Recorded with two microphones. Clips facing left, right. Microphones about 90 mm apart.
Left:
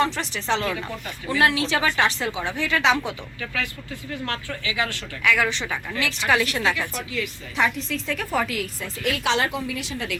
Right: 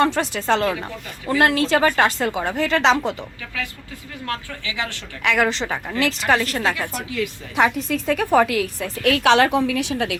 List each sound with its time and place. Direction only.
0.0 s speech: 45° right (ahead or behind); by 3.0 s 30° right (ahead or behind)
5.4 s a woman's voice: 35° right (ahead or behind)
7.5 s a woman's voice: 55° right (ahead or behind)
9.6 s a woman's voice: 90° right